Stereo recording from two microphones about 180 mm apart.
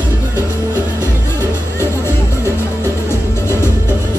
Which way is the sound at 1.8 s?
15° left (ahead or behind).